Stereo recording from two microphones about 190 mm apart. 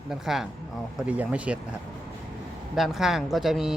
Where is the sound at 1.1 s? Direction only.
5° right (ahead or behind).